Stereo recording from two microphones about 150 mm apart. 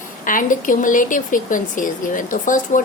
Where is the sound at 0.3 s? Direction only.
60° left (ahead or behind).